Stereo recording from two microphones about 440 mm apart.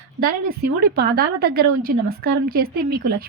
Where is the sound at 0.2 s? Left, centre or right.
Right.